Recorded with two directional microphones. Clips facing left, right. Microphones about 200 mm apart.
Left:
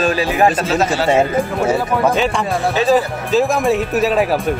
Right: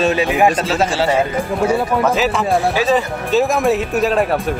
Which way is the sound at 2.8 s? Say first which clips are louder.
Left 2 dB; centre (ahead or behind).